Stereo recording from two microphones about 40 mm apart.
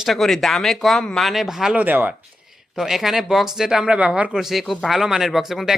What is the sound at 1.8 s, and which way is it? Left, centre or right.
Speech, right.